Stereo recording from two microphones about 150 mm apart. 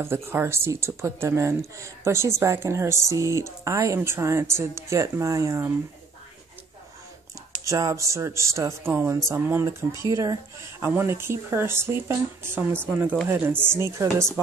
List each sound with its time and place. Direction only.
0.0 s speech: 15° right (ahead or behind)
7.6 s speech: 20° right (ahead or behind)